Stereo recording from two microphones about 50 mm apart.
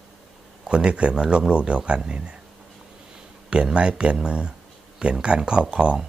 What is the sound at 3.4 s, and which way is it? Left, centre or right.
Speech, centre.